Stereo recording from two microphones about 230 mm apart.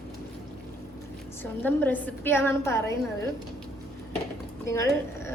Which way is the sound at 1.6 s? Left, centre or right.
Centre.